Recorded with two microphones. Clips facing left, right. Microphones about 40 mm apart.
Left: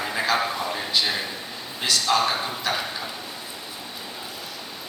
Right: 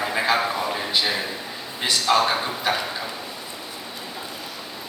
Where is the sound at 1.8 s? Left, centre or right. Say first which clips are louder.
Right 2 dB; centre.